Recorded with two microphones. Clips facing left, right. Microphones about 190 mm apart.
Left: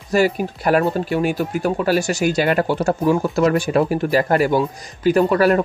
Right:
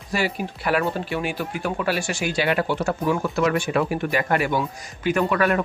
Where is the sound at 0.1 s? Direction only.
45° left (ahead or behind).